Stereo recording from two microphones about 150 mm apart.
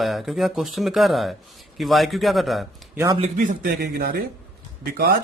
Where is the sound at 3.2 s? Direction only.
60° right (ahead or behind); by 4.1 s 90° right.